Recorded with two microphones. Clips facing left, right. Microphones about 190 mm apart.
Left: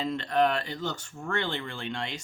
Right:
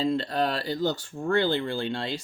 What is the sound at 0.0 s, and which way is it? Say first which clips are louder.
Speech: even; 30° right (ahead or behind).